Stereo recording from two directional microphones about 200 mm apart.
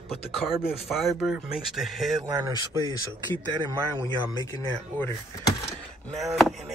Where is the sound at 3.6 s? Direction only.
20° right (ahead or behind).